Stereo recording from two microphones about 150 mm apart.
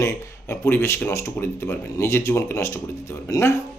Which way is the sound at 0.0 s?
20° left (ahead or behind).